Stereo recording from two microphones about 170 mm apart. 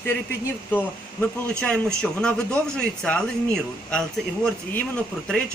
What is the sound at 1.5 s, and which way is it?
A man's voice, 5° left (ahead or behind).